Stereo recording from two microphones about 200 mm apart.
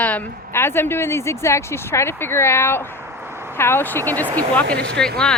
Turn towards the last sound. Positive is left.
turn(degrees=5)  # may be behind; listen again after turning